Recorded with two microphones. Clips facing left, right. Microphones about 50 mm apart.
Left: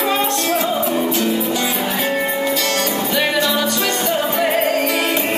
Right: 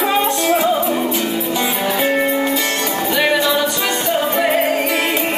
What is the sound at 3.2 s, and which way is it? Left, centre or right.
Music, centre.